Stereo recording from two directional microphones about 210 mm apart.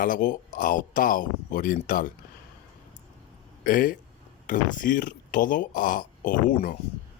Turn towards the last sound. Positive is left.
turn(degrees=40)  # may be behind; listen again after turning